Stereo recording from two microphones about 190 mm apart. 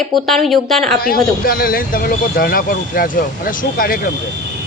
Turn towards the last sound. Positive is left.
turn(degrees=50)  # may be behind; listen again after turning